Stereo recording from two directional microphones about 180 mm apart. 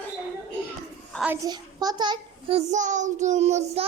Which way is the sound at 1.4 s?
20° right (ahead or behind).